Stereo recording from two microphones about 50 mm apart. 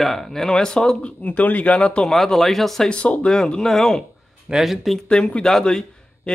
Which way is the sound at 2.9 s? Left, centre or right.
Left.